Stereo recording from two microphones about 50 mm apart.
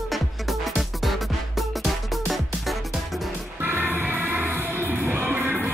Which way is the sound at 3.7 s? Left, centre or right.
Right.